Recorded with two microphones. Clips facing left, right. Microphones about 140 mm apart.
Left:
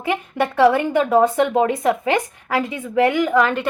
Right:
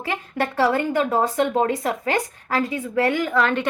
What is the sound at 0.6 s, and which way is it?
A woman's voice, 15° left (ahead or behind).